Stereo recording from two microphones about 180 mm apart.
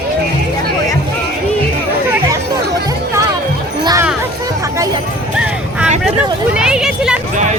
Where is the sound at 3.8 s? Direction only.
20° right (ahead or behind).